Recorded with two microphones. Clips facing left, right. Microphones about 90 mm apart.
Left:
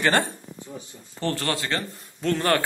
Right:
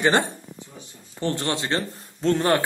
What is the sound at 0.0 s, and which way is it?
Speech, 20° right (ahead or behind).